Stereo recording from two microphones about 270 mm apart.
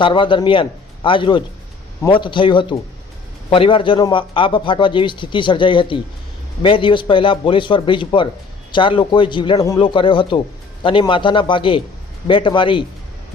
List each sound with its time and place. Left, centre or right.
0.0 s a man's voice: centre